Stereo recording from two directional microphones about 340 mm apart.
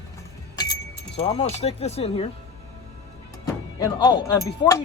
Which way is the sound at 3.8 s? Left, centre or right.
Centre.